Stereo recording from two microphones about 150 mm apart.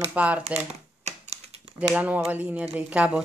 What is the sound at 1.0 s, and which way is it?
Typewriter, 45° right (ahead or behind).